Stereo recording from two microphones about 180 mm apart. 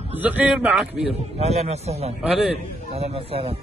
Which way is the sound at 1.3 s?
35° right (ahead or behind).